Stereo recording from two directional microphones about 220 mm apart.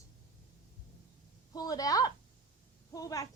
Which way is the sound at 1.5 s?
15° left (ahead or behind).